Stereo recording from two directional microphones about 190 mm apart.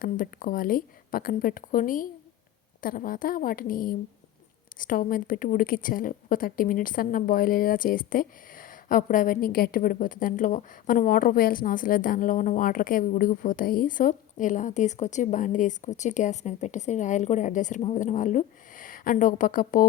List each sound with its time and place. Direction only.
0.0 s a woman's voice: 45° left (ahead or behind)